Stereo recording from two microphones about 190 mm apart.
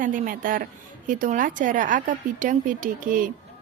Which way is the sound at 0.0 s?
45° right (ahead or behind).